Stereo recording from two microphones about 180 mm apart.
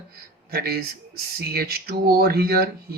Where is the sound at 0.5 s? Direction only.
60° right (ahead or behind).